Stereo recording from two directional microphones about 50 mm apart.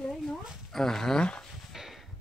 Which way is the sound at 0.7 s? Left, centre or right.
Centre.